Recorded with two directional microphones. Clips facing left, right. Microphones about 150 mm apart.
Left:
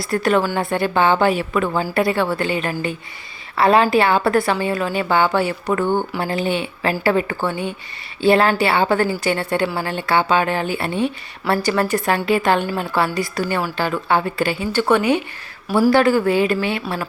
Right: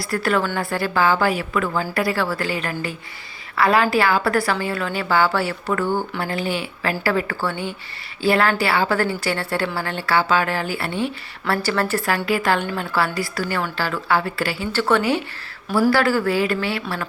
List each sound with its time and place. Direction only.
0.0 s a woman's voice: 20° left (ahead or behind)